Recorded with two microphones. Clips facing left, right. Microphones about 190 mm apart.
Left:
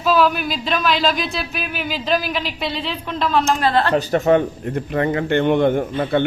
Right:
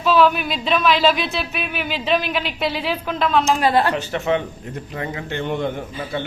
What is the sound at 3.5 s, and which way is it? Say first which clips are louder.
Speech: right 1 dB; 10° right (ahead or behind).